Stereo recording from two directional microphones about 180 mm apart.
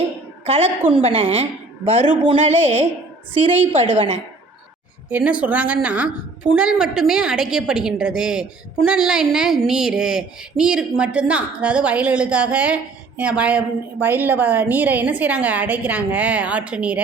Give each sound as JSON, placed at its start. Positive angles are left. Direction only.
{"t": 0.4, "sound": "a woman's voice", "side_deg": -35}
{"t": 3.9, "sound": "speech", "side_deg": -30}
{"t": 5.1, "sound": "a woman's voice", "side_deg": -5}